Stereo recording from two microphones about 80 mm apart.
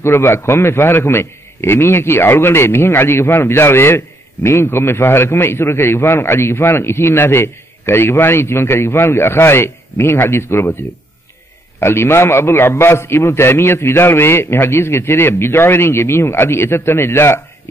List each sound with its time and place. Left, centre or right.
0.0 s a man's voice: left